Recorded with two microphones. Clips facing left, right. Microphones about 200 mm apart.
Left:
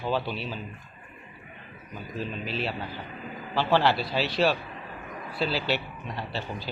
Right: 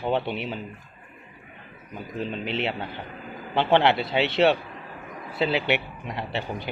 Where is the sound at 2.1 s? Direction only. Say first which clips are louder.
Right 4 dB; 20° right (ahead or behind).